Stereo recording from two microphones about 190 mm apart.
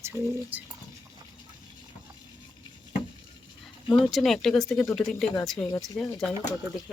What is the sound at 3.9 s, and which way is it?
Speech, centre (ahead or behind).